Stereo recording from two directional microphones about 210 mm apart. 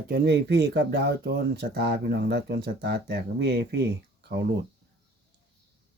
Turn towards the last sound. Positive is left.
turn(degrees=-50)  # may be behind; listen again after turning